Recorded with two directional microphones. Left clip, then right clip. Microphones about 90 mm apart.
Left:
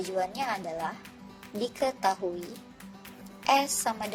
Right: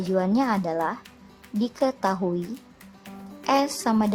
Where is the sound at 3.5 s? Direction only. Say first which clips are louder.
Right 3 dB; 30° right (ahead or behind).